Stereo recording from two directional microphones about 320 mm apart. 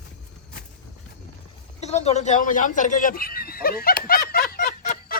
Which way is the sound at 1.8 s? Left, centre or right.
Centre.